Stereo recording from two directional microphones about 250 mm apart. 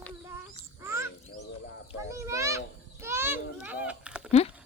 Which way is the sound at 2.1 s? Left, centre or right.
Centre.